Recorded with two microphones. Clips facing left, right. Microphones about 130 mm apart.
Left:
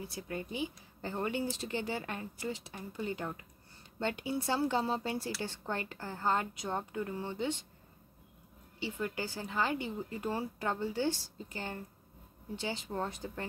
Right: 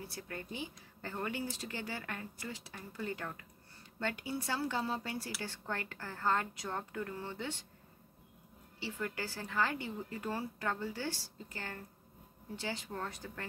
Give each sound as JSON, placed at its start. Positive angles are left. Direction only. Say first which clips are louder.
{"t": 0.1, "sound": "a woman's voice", "louder": "left 5 dB", "side_deg": 15}
{"t": 8.7, "sound": "a woman's voice", "louder": "left 3 dB", "side_deg": 20}